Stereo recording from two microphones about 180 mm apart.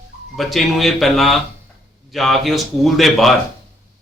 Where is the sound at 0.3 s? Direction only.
Centre (ahead or behind).